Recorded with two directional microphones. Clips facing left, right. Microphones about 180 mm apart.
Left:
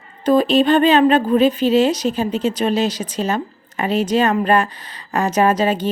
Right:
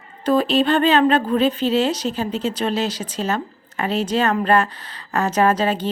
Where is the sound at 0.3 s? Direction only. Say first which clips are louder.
Left 3 dB; 15° left (ahead or behind).